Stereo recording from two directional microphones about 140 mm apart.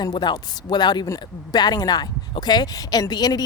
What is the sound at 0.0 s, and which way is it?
Speech, 30° left (ahead or behind).